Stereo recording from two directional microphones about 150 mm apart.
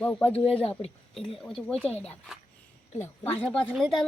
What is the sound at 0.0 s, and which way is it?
Speech, 10° left (ahead or behind).